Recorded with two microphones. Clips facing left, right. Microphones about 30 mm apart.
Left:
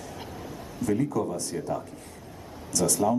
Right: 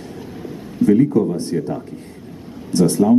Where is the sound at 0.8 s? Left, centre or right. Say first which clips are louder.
Right 12 dB; right.